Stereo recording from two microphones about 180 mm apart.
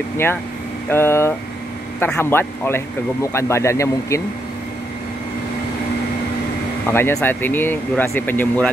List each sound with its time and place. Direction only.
0.8 s speech: 15° left (ahead or behind)
6.9 s speech: 15° left (ahead or behind)